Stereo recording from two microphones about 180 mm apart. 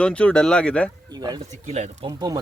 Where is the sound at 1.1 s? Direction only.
20° right (ahead or behind).